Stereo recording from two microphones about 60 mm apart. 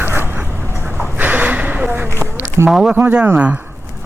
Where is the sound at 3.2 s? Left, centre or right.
Right.